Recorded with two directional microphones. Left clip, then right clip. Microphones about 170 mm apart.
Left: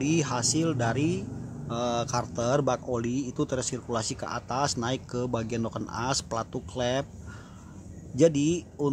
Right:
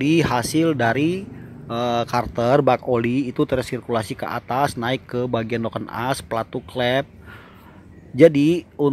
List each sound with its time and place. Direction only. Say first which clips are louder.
0.0 s speech: right 8 dB; 25° right (ahead or behind)
8.2 s speech: right 9 dB; 25° right (ahead or behind)